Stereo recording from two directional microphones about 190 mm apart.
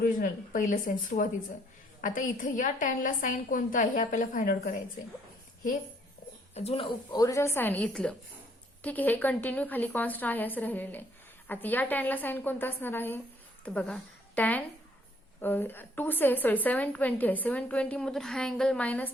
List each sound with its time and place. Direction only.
0.0 s a woman's voice: 45° left (ahead or behind)
6.5 s a woman's voice: 35° left (ahead or behind); by 19.1 s 10° left (ahead or behind)